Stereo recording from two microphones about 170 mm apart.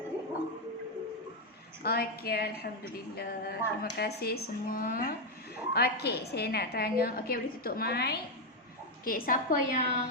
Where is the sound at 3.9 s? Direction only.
65° left (ahead or behind).